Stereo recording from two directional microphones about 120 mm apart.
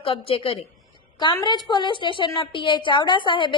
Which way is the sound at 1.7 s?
40° left (ahead or behind).